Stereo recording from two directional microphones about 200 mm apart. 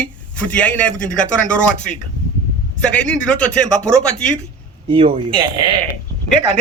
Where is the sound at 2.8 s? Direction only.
5° left (ahead or behind).